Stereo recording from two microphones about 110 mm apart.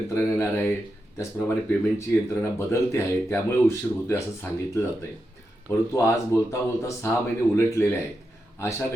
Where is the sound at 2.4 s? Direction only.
25° left (ahead or behind).